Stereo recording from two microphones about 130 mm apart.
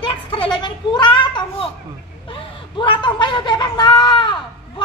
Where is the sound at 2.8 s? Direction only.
40° left (ahead or behind).